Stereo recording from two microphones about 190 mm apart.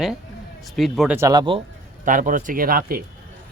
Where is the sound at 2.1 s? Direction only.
45° right (ahead or behind).